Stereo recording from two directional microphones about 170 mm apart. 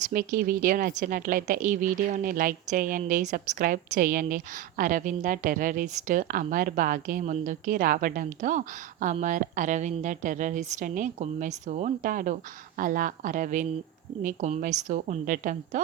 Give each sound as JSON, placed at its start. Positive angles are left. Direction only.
{"t": 0.1, "sound": "a woman's voice", "side_deg": -60}